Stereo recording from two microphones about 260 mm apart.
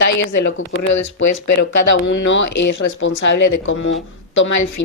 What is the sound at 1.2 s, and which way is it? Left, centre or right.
A woman's voice, left.